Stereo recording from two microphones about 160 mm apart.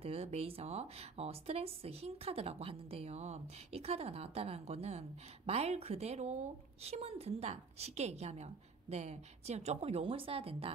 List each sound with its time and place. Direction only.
0.0 s speech: 40° right (ahead or behind)